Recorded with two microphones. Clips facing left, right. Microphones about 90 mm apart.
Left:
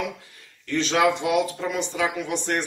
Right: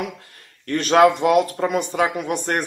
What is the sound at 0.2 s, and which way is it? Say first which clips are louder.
Speech: right 4 dB; 55° right (ahead or behind).